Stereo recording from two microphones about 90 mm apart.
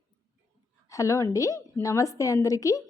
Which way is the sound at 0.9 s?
35° left (ahead or behind).